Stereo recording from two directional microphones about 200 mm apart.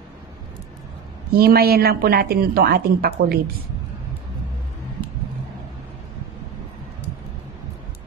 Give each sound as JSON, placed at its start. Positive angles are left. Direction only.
{"t": 1.3, "sound": "a woman's voice", "side_deg": -50}